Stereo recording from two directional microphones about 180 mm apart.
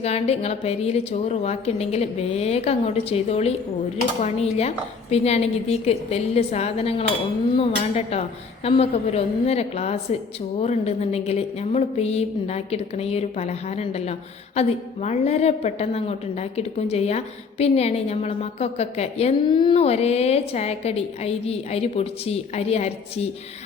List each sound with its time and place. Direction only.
0.0 s a woman's voice: 35° left (ahead or behind)